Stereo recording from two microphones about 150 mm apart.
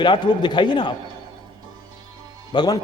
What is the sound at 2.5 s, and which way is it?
Speech, 25° left (ahead or behind).